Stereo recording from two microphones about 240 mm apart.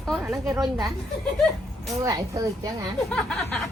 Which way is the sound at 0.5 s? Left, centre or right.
Centre.